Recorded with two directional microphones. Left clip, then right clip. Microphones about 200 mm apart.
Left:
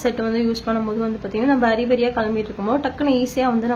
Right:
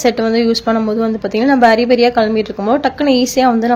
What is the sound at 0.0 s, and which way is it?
A woman's voice, 30° right (ahead or behind).